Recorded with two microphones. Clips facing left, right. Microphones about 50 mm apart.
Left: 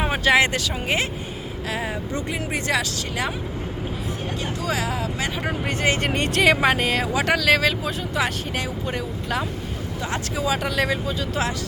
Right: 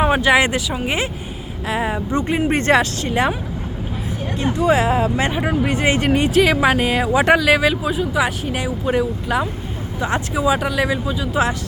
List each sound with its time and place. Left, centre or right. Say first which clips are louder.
0.0 s speech: right 4 dB; centre
0.7 s speech: right 3 dB; centre
1.6 s speech: right 7 dB; right
2.5 s speech: right 8 dB; right
3.1 s speech: right 9 dB; right
4.5 s speech: right 11 dB; right
5.3 s speech: right 7 dB; centre
6.1 s speech: right 4 dB; centre